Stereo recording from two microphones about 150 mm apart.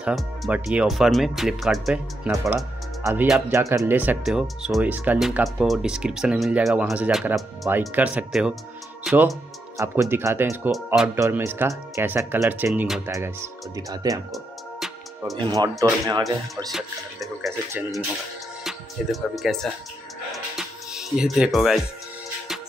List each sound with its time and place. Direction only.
0.0 s speech: 5° right (ahead or behind)
2.5 s music: 15° right (ahead or behind)
3.3 s speech: 20° right (ahead or behind)
14.3 s music: centre (ahead or behind)
15.3 s speech: 30° right (ahead or behind)
16.7 s speech: centre (ahead or behind)
20.5 s music: 5° right (ahead or behind)